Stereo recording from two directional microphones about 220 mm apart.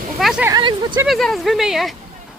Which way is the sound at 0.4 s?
20° right (ahead or behind).